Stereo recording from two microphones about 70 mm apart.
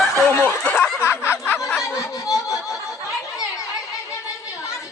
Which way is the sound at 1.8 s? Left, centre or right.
Left.